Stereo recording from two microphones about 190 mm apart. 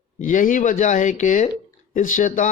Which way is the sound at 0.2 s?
45° left (ahead or behind).